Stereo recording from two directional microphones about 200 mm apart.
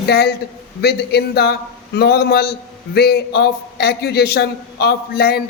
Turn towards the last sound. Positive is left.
turn(degrees=50)  # may be behind; listen again after turning